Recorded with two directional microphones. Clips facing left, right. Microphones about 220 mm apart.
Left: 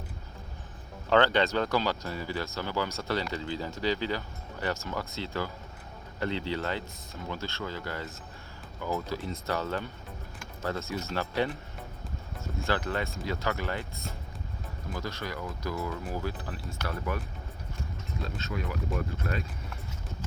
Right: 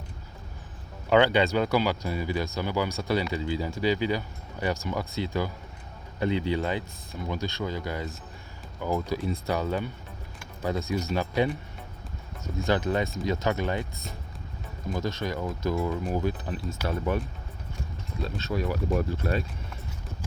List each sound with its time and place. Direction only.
1.1 s speech: 10° right (ahead or behind)
12.6 s speech: 15° right (ahead or behind)
18.3 s speech: 35° right (ahead or behind)